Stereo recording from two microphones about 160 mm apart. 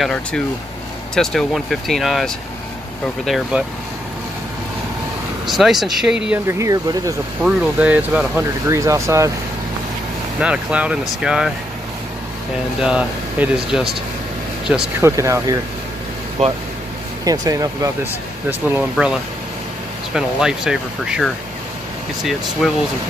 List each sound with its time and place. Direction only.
0.0 s speech: 5° left (ahead or behind)
5.5 s speech: centre (ahead or behind)
6.4 s speech: 20° right (ahead or behind)
7.4 s speech: 5° right (ahead or behind)
8.6 s speech: 20° right (ahead or behind)
10.4 s speech: 10° right (ahead or behind)
12.8 s speech: 5° right (ahead or behind)
15.0 s speech: 15° right (ahead or behind)
17.2 s speech: 20° right (ahead or behind)
20.2 s speech: 5° right (ahead or behind)
22.6 s speech: centre (ahead or behind)